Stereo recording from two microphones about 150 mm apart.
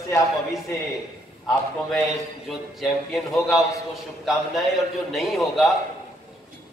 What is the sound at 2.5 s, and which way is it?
A man's voice, centre (ahead or behind).